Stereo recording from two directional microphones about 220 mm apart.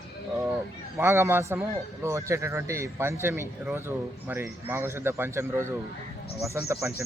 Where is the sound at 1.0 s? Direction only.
10° right (ahead or behind).